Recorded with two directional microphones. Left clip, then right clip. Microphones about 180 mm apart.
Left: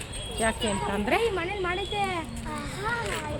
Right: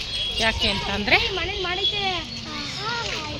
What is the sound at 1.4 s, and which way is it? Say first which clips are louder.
Speech: right 4 dB; 55° left (ahead or behind).